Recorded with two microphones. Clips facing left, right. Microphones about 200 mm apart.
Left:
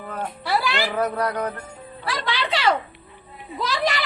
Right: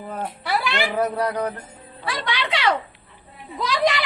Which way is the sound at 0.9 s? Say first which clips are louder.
Right 2 dB; 15° right (ahead or behind).